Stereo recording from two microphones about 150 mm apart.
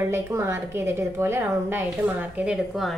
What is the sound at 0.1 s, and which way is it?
A woman's voice, 20° right (ahead or behind).